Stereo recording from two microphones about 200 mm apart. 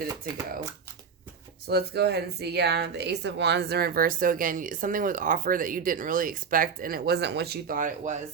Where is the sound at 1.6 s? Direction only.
55° right (ahead or behind).